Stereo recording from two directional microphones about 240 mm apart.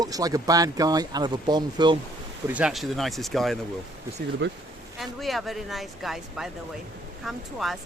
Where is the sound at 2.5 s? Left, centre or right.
Centre.